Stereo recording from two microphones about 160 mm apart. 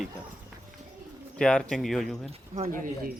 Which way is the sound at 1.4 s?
5° left (ahead or behind).